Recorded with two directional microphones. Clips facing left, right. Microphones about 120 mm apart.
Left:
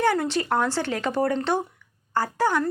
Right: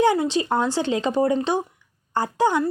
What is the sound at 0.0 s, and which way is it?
Speech, 15° right (ahead or behind).